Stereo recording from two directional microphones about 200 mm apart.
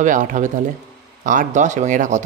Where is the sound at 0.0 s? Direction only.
40° right (ahead or behind).